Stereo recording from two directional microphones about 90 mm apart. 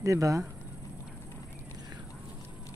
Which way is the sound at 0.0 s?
35° right (ahead or behind).